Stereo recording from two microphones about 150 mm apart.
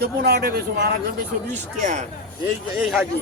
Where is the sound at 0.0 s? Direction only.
90° right.